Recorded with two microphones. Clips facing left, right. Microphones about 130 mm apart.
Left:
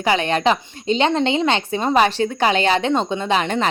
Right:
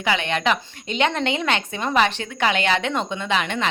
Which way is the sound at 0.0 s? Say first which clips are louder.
Left 5 dB; 35° left (ahead or behind).